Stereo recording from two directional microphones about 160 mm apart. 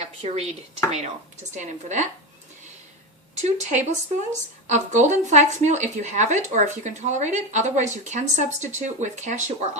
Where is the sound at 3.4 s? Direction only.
45° right (ahead or behind).